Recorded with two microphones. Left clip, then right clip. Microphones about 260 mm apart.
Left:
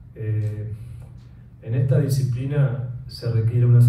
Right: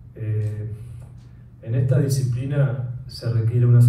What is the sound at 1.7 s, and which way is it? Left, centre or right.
Speech, left.